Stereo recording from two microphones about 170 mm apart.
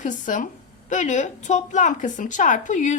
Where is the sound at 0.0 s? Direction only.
45° left (ahead or behind).